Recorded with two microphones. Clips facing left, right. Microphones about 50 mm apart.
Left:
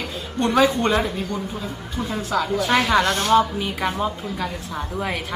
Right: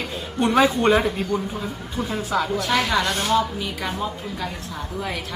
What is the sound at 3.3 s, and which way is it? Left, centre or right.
Speech, left.